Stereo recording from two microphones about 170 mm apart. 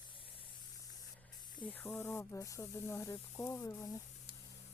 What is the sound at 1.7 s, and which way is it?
Speech, 10° left (ahead or behind).